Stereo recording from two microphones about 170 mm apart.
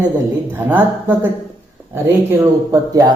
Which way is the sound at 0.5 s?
10° right (ahead or behind).